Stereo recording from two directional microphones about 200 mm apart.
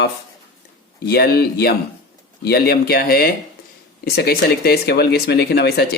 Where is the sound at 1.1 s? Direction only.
50° left (ahead or behind).